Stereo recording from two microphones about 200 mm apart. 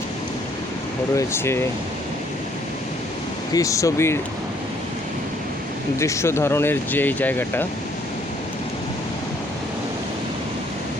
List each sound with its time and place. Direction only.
1.1 s speech: 15° left (ahead or behind)
3.5 s speech: 15° left (ahead or behind)
6.0 s speech: 15° left (ahead or behind)